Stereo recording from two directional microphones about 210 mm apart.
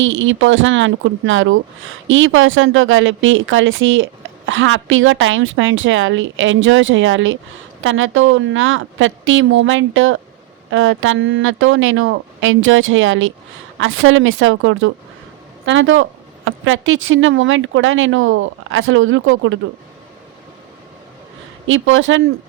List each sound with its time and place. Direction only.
0.0 s speech: 65° right (ahead or behind)
21.7 s speech: 70° right (ahead or behind)